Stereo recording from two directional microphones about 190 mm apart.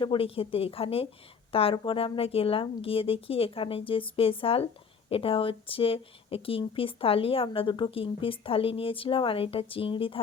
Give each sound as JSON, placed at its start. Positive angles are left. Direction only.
{"t": 0.0, "sound": "speech", "side_deg": 30}